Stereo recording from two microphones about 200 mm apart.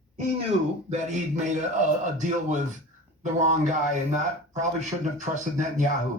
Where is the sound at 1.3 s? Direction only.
35° right (ahead or behind).